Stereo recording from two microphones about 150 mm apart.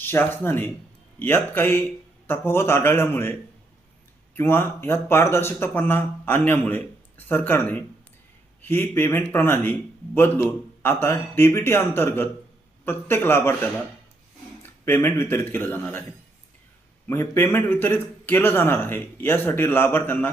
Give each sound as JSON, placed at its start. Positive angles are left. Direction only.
{"t": 0.0, "sound": "a man's voice", "side_deg": 15}
{"t": 4.4, "sound": "a man's voice", "side_deg": 15}
{"t": 17.1, "sound": "a man's voice", "side_deg": 15}